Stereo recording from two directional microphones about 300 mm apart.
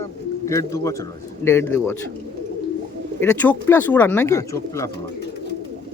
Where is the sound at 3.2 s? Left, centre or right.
Centre.